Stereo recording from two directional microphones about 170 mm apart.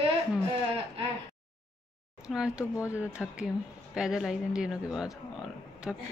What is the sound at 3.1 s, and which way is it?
A woman's voice, 5° right (ahead or behind).